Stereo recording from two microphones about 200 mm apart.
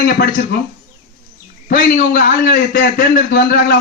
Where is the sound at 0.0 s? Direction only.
50° left (ahead or behind).